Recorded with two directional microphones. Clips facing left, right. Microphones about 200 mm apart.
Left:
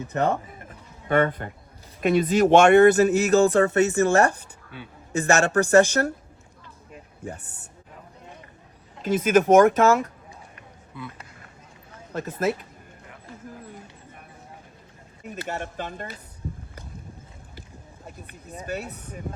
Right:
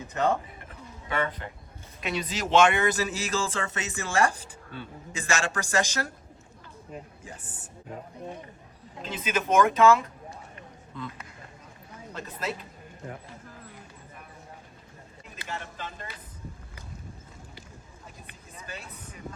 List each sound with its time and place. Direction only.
1.0 s speech: 50° left (ahead or behind)
9.0 s speech: 50° left (ahead or behind)
10.9 s speech: 10° left (ahead or behind)
12.1 s speech: 50° left (ahead or behind)
15.4 s speech: 55° left (ahead or behind)
18.6 s speech: 60° left (ahead or behind)